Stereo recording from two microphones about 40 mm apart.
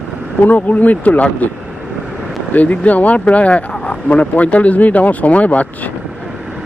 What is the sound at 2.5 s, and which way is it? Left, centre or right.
Speech, left.